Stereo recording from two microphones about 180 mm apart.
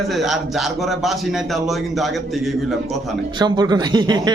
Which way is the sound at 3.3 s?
25° right (ahead or behind).